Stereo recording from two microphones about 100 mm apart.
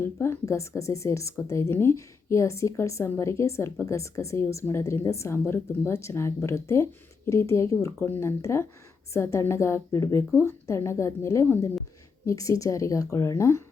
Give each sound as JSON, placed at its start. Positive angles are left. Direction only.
{"t": 0.0, "sound": "a woman's voice", "side_deg": 25}